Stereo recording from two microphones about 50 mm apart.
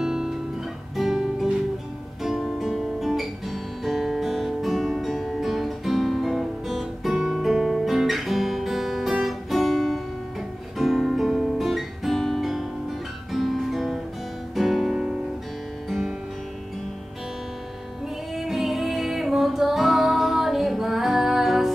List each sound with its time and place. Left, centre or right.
0.0 s guitar: centre
2.2 s music: centre
18.3 s music: centre